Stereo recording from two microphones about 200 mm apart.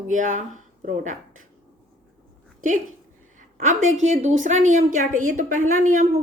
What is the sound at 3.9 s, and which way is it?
A woman's voice, 35° right (ahead or behind).